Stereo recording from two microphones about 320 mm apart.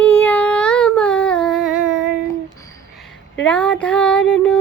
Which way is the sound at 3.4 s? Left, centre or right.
Centre.